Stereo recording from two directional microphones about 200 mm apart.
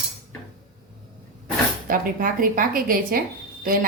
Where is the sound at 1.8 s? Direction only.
45° right (ahead or behind).